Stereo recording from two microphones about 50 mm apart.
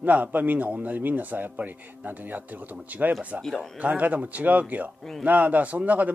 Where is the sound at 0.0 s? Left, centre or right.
Right.